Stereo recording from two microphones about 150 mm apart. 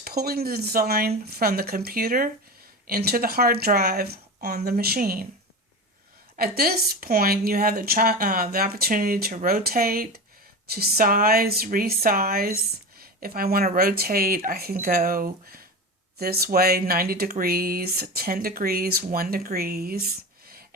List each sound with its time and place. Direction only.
0.0 s speech: 90° right
2.8 s speech: 90° right
6.3 s speech: 85° right
9.3 s speech: 70° right (ahead or behind)
16.1 s speech: 90° right